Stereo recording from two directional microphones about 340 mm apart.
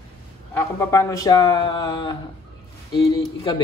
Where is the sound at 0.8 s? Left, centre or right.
Centre.